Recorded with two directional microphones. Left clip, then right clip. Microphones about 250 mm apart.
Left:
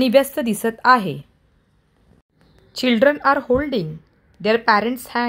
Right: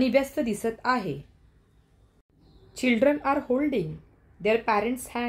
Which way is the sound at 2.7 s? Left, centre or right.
Centre.